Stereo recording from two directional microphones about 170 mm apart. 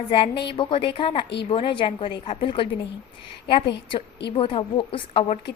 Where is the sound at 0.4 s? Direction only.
30° left (ahead or behind).